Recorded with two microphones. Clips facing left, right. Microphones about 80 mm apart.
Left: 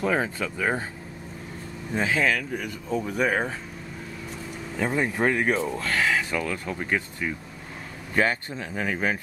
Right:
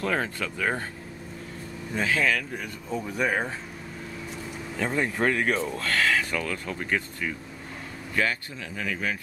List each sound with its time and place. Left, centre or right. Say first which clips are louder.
0.0 s speech: left 3 dB; centre
2.0 s speech: left 1 dB; centre
4.7 s speech: left 2 dB; centre
8.1 s speech: left 4 dB; left